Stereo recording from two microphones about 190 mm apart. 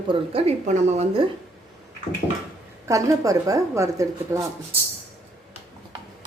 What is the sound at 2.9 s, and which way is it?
Speech, 15° right (ahead or behind).